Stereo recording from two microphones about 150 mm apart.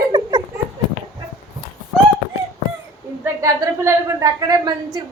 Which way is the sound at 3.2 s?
20° right (ahead or behind).